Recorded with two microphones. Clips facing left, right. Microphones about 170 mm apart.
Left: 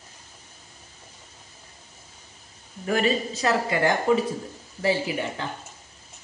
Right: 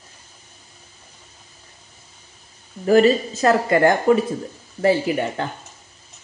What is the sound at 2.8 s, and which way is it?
Speech, 35° right (ahead or behind).